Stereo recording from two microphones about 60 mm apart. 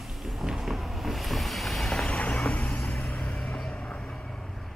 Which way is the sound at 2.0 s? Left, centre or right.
Centre.